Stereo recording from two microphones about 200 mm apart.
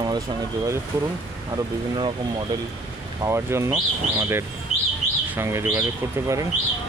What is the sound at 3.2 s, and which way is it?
Speech, 15° right (ahead or behind).